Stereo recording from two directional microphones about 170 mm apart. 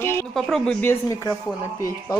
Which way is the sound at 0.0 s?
15° left (ahead or behind).